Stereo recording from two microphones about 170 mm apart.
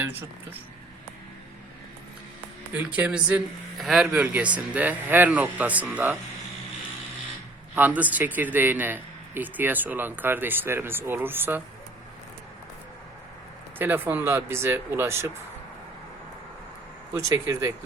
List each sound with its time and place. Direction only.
0.0 s speech: 10° right (ahead or behind)
2.7 s speech: 10° right (ahead or behind)
7.8 s speech: 10° right (ahead or behind)
13.7 s speech: 10° right (ahead or behind)
17.2 s speech: 20° right (ahead or behind)